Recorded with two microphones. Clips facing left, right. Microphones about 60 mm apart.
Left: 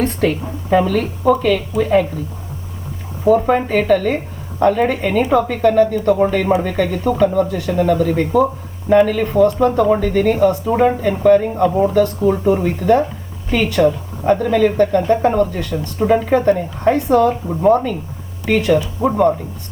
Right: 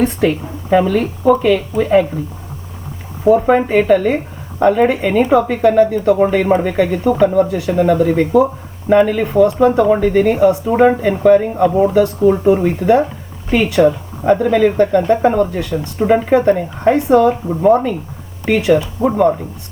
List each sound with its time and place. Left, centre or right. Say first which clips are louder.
0.0 s a woman's voice: right 2 dB; centre
1.4 s a woman's voice: right 2 dB; centre
3.4 s a woman's voice: right 3 dB; centre
17.2 s a woman's voice: right 2 dB; centre